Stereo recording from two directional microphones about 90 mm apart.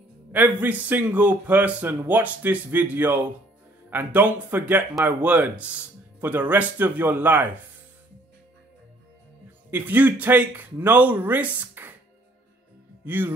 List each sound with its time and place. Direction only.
0.3 s a man's voice: 20° right (ahead or behind)
9.7 s speech: 20° right (ahead or behind)
13.0 s speech: 20° right (ahead or behind)